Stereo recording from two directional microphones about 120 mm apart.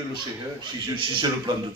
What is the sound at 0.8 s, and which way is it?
Speech, 40° right (ahead or behind).